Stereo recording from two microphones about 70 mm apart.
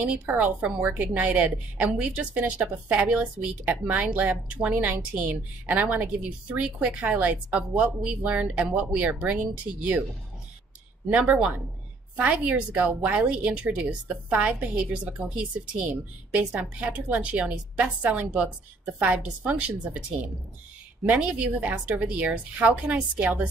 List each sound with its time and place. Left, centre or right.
0.0 s a woman's voice: right
11.1 s a woman's voice: centre
21.0 s a woman's voice: centre